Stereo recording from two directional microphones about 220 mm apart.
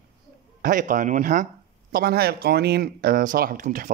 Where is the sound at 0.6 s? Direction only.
35° right (ahead or behind).